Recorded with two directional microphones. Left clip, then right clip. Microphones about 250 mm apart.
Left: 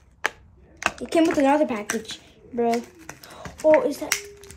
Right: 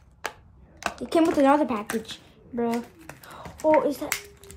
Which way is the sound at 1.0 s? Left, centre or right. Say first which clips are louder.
Even; centre.